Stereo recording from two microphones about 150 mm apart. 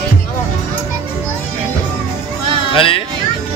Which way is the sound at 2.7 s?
35° left (ahead or behind).